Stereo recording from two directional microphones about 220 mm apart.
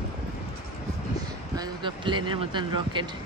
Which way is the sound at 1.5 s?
20° right (ahead or behind).